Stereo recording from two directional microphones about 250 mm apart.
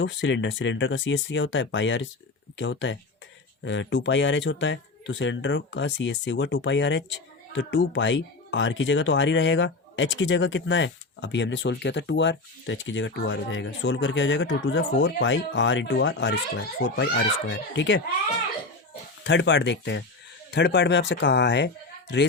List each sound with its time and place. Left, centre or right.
0.0 s speech: left
19.2 s speech: left